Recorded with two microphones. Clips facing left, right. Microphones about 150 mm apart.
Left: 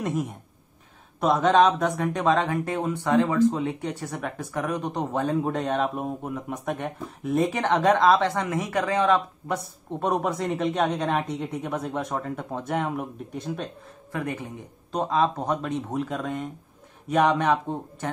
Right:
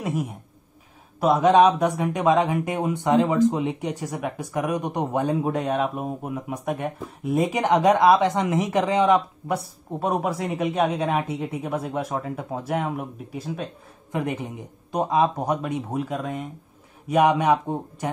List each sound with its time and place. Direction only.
0.0 s speech: 5° right (ahead or behind)
14.1 s speech: 15° right (ahead or behind)